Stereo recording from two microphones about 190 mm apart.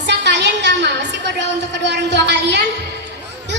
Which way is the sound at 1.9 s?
60° right (ahead or behind).